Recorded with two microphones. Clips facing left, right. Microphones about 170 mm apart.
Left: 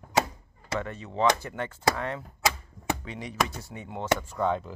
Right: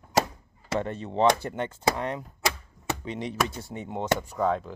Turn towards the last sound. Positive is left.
turn(degrees=0)  # may be behind; listen again after turning